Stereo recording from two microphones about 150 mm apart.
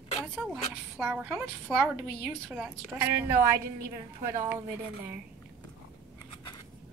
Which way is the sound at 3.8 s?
20° right (ahead or behind).